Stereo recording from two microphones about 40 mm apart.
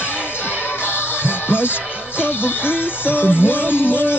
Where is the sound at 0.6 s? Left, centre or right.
Left.